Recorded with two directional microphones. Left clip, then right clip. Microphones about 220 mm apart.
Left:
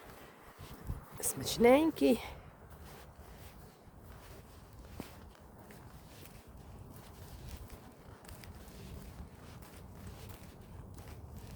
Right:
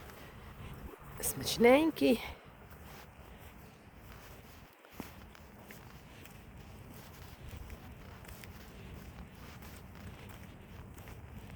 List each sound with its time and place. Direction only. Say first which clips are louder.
1.2 s speech: right 1 dB; 5° left (ahead or behind)